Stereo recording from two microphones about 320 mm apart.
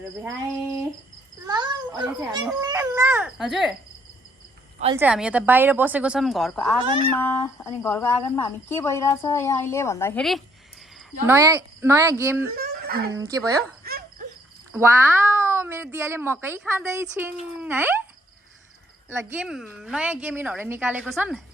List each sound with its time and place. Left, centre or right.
1.5 s speech: centre
4.9 s a woman's voice: centre
12.5 s a sound: right
13.1 s speech: centre
13.8 s dog: right
14.7 s a woman's voice: centre
19.3 s a woman's voice: centre